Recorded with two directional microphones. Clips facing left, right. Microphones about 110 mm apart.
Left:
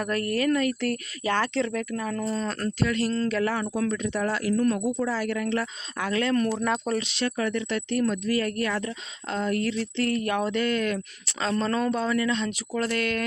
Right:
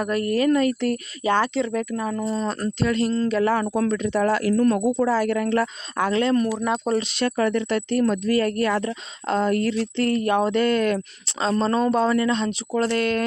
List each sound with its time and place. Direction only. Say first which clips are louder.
0.0 s speech: right 4 dB; 20° right (ahead or behind)
2.8 s speech: right 4 dB; 30° right (ahead or behind)
3.1 s speech: right 4 dB; 20° right (ahead or behind)
3.5 s speech: right 5 dB; 50° right (ahead or behind)
6.1 s speech: right 4 dB; 25° right (ahead or behind)
6.4 s speech: right 2 dB; 10° right (ahead or behind)
6.7 s speech: right 4 dB; 25° right (ahead or behind)
7.2 s speech: right 5 dB; 50° right (ahead or behind)
11.4 s speech: right 4 dB; 30° right (ahead or behind)